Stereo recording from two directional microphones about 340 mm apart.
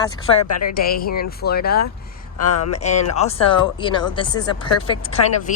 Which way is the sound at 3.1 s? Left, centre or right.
Centre.